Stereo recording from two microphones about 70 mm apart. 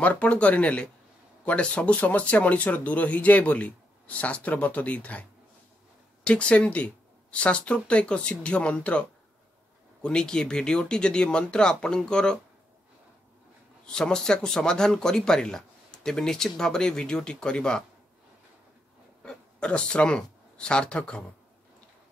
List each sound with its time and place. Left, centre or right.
0.0 s speech: centre
6.2 s speech: centre
10.0 s speech: centre
13.8 s speech: centre
19.2 s speech: centre